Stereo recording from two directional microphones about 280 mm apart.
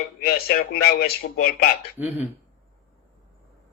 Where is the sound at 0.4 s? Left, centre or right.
Left.